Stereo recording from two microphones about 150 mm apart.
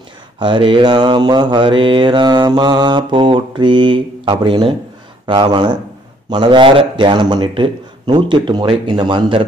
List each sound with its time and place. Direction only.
0.4 s mantra: 30° right (ahead or behind)